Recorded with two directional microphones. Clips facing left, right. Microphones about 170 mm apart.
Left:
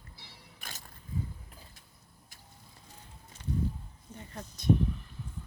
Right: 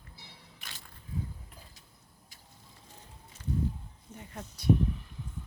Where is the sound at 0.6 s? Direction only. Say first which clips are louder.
Left 4 dB; 45° left (ahead or behind).